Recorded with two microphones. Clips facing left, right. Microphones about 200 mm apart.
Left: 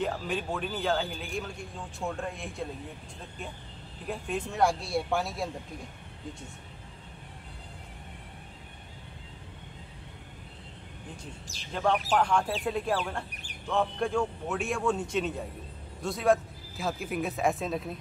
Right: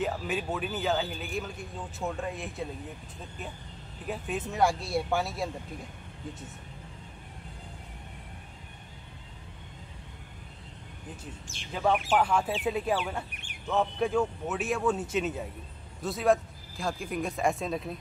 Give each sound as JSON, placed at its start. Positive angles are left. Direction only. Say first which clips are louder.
{"t": 0.0, "sound": "speech", "louder": "even", "side_deg": -5}
{"t": 4.1, "sound": "speech", "louder": "even", "side_deg": -5}
{"t": 11.7, "sound": "speech", "louder": "right 1 dB", "side_deg": -5}
{"t": 13.3, "sound": "speech", "louder": "left 1 dB", "side_deg": 35}
{"t": 13.7, "sound": "speech", "louder": "right 1 dB", "side_deg": -5}